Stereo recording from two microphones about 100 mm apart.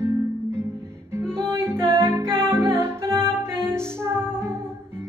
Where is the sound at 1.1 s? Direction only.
25° right (ahead or behind).